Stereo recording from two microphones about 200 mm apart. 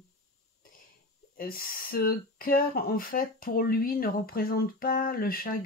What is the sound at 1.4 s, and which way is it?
Speech, 45° left (ahead or behind).